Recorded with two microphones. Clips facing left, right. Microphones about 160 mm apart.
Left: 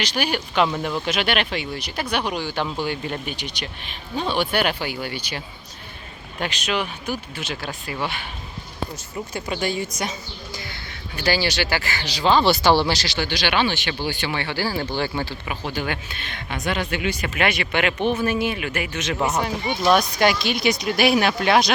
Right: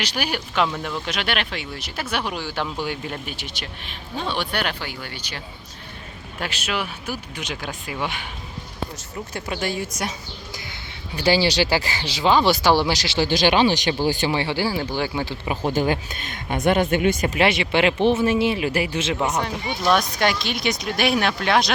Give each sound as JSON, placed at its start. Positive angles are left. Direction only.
{"t": 0.0, "sound": "speech", "side_deg": -10}
{"t": 6.4, "sound": "speech", "side_deg": -5}
{"t": 9.3, "sound": "speech", "side_deg": 0}
{"t": 11.3, "sound": "speech", "side_deg": -30}
{"t": 12.2, "sound": "speech", "side_deg": -10}
{"t": 13.1, "sound": "speech", "side_deg": -35}
{"t": 14.3, "sound": "speech", "side_deg": -25}
{"t": 14.7, "sound": "speech", "side_deg": -10}
{"t": 15.6, "sound": "speech", "side_deg": -40}
{"t": 17.3, "sound": "speech", "side_deg": -25}
{"t": 19.8, "sound": "speech", "side_deg": 5}